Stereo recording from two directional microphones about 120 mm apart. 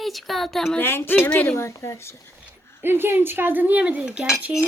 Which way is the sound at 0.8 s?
20° left (ahead or behind).